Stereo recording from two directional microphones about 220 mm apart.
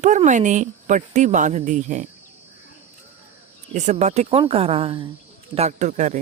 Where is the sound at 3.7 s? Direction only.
30° right (ahead or behind).